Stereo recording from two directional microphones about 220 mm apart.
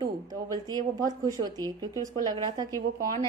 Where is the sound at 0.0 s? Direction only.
15° right (ahead or behind).